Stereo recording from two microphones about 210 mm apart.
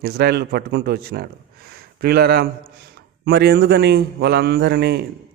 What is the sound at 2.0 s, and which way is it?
A man's voice, 50° right (ahead or behind).